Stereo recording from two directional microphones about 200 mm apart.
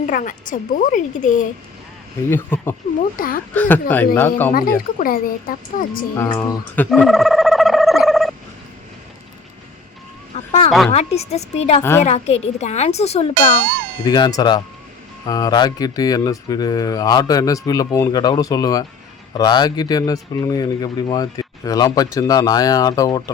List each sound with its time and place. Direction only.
0.0 s speech: 40° left (ahead or behind)
2.3 s speech: 10° left (ahead or behind)
3.2 s a woman's voice: 45° left (ahead or behind)
3.5 s speech: 10° left (ahead or behind)
4.9 s a woman's voice: 45° left (ahead or behind)
6.1 s a sound: 10° left (ahead or behind)
10.3 s a sound: 30° left (ahead or behind)
10.7 s speech: centre (ahead or behind)
10.9 s speech: 30° left (ahead or behind)
11.8 s speech: 10° left (ahead or behind)
12.0 s speech: 35° left (ahead or behind)